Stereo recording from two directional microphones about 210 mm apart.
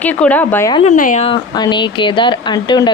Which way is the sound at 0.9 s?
40° left (ahead or behind).